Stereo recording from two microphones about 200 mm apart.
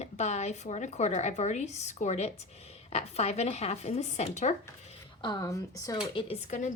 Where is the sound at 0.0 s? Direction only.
35° left (ahead or behind).